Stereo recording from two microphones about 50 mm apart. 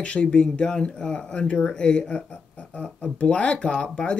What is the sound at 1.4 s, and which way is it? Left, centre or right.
Speech, left.